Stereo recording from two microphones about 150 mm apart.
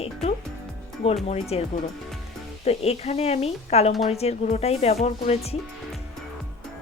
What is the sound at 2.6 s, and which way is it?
Speech, 45° left (ahead or behind).